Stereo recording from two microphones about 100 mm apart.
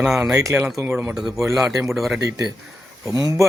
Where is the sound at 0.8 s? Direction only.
20° right (ahead or behind).